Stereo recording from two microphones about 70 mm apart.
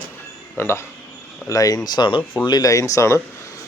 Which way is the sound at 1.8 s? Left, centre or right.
Left.